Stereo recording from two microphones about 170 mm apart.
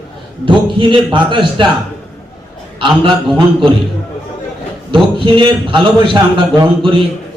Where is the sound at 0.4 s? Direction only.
30° right (ahead or behind).